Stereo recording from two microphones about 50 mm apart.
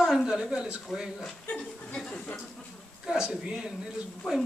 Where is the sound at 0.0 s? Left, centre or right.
Centre.